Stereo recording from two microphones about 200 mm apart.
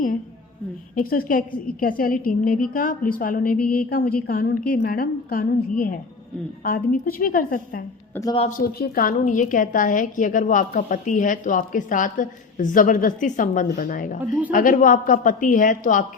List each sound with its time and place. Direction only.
0.9 s a woman's voice: 45° left (ahead or behind)
8.1 s a man's voice: 15° left (ahead or behind)
8.4 s a woman's voice: 40° left (ahead or behind)